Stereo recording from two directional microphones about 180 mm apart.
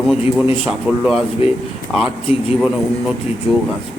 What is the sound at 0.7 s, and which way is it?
Speech, centre (ahead or behind).